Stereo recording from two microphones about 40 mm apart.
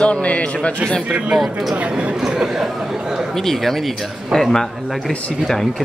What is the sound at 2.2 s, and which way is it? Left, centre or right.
Speech, centre.